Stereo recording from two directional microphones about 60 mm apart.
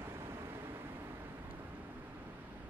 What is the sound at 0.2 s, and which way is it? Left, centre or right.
Vehicle, right.